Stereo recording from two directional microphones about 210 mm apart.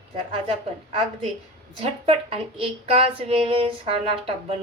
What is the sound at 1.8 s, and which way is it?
Speech, 25° right (ahead or behind).